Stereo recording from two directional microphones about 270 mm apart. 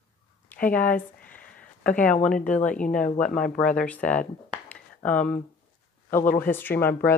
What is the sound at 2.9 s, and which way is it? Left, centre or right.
Speech, left.